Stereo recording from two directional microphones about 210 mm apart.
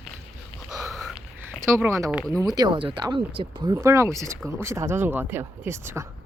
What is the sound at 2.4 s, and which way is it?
Speech, 20° right (ahead or behind).